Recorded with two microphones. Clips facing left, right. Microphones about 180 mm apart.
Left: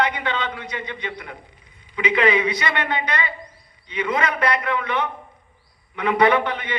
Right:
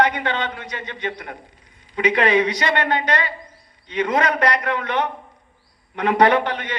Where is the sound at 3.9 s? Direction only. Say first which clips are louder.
Right 3 dB; 45° right (ahead or behind).